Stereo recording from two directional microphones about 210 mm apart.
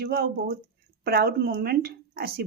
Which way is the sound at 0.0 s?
45° right (ahead or behind).